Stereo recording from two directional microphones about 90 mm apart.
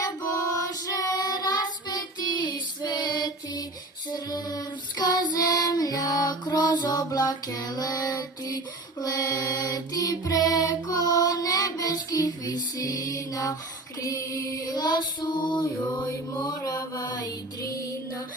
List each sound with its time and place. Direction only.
0.0 s child singing: 40° left (ahead or behind)
14.0 s female singing: 40° left (ahead or behind); by 15.6 s 60° left (ahead or behind)
15.8 s mantra: 20° left (ahead or behind)
16.6 s music: 35° left (ahead or behind)